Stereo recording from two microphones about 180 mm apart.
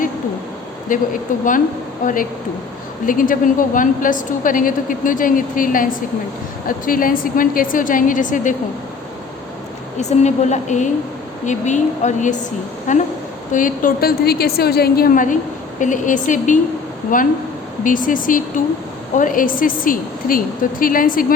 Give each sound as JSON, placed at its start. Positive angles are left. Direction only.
{"t": 0.9, "sound": "a woman's voice", "side_deg": 50}
{"t": 10.0, "sound": "a woman's voice", "side_deg": 40}